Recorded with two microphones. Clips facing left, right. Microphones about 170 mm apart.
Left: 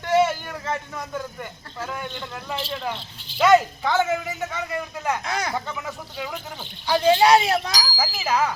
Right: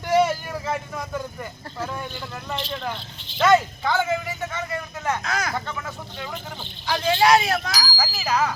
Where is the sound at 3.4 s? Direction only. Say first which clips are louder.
Left 1 dB; 15° left (ahead or behind).